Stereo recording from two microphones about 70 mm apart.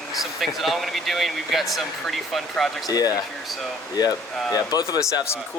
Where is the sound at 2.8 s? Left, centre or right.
Left.